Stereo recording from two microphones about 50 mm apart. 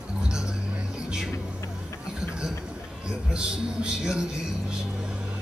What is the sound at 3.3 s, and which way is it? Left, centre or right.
Speech, centre.